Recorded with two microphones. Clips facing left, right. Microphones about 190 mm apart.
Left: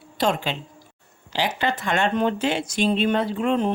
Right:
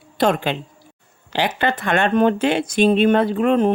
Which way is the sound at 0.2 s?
60° right (ahead or behind).